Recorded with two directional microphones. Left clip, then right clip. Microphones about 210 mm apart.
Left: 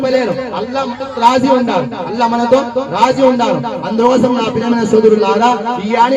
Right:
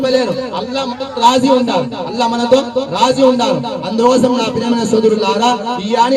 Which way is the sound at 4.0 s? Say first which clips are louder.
Even; 20° left (ahead or behind).